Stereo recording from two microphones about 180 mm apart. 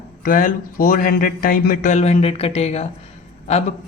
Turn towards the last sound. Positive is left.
turn(degrees=35)  # may be behind; listen again after turning